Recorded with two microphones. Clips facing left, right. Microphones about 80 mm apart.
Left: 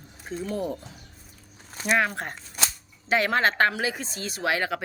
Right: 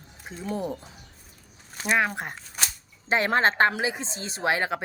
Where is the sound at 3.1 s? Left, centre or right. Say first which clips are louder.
Even; right.